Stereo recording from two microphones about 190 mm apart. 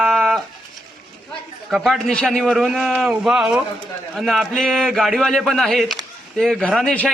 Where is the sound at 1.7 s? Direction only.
Centre (ahead or behind).